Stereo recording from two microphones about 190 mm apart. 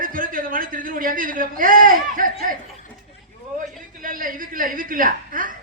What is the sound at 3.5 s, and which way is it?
A man's voice, 45° right (ahead or behind).